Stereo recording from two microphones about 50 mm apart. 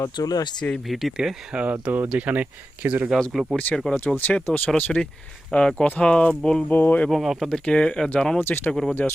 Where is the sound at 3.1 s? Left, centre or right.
Centre.